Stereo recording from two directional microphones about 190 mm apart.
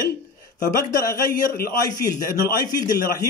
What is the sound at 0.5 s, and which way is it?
A man's voice, 55° left (ahead or behind).